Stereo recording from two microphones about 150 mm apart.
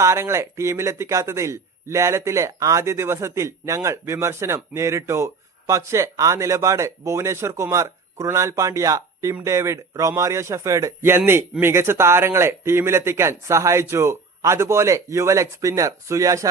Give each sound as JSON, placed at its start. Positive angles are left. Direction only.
{"t": 0.0, "sound": "speech", "side_deg": -20}